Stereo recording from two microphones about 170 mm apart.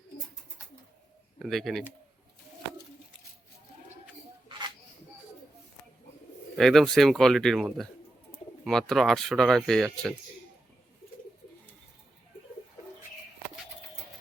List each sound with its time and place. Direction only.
1.4 s speech: centre (ahead or behind)
4.4 s a sound: 25° right (ahead or behind)
6.6 s speech: centre (ahead or behind)